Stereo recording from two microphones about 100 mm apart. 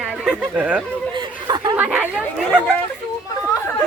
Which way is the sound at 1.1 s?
50° right (ahead or behind).